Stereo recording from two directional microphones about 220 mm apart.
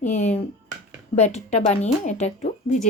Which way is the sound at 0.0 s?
30° left (ahead or behind).